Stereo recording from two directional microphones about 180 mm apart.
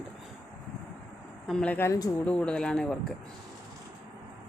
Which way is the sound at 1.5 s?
5° left (ahead or behind).